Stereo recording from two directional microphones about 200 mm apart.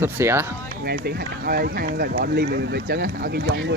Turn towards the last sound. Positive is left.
turn(degrees=-55)  # may be behind; listen again after turning